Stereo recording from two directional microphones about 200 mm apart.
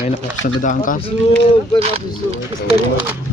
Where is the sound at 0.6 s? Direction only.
40° left (ahead or behind).